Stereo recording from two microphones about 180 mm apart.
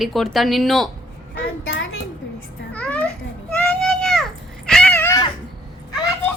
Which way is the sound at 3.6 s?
5° left (ahead or behind).